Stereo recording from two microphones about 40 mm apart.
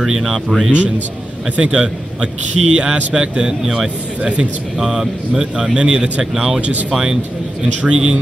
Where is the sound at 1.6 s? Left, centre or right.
Right.